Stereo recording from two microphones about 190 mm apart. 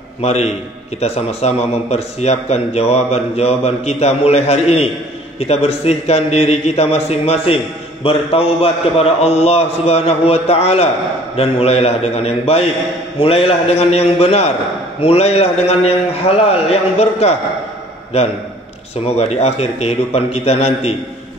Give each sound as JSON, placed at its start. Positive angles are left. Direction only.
{"t": 0.2, "sound": "speech", "side_deg": 35}